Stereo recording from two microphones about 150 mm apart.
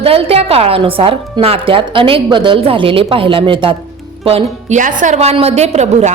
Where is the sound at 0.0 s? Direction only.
40° right (ahead or behind).